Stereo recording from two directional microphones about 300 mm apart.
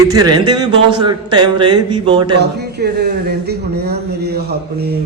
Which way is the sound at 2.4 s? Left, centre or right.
Right.